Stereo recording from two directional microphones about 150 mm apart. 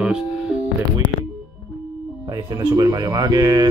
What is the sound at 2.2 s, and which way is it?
Speech, 20° right (ahead or behind).